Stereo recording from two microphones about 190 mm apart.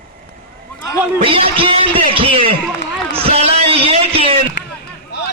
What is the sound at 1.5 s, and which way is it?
Music, 30° right (ahead or behind).